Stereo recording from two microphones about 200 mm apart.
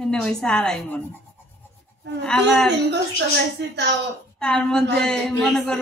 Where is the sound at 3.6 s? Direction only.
55° right (ahead or behind).